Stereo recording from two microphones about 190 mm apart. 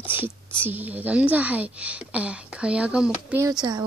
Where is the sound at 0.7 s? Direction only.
10° right (ahead or behind).